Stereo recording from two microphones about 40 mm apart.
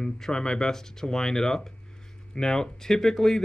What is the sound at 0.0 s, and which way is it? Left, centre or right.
Speech, centre.